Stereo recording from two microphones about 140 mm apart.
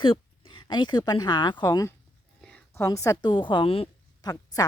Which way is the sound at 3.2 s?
35° left (ahead or behind).